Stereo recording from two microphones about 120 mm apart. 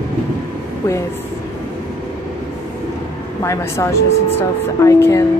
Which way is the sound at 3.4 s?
25° left (ahead or behind).